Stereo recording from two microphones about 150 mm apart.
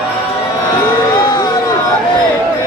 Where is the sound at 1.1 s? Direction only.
25° left (ahead or behind).